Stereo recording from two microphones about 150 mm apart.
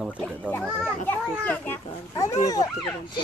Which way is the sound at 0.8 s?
10° left (ahead or behind).